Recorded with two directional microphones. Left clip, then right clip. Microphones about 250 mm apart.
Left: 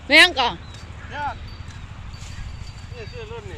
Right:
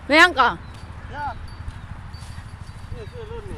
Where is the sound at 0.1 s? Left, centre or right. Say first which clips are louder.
Even; centre.